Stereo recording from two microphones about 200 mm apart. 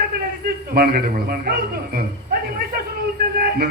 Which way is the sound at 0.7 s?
50° right (ahead or behind).